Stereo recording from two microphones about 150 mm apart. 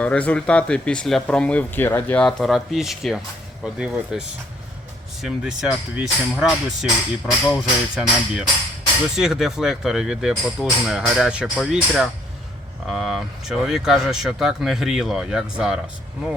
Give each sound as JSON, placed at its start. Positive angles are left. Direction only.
{"t": 0.0, "sound": "speech", "side_deg": 10}
{"t": 5.2, "sound": "speech", "side_deg": -5}